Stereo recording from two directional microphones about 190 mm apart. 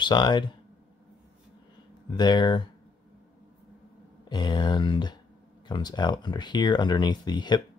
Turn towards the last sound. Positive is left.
turn(degrees=20)  # may be behind; listen again after turning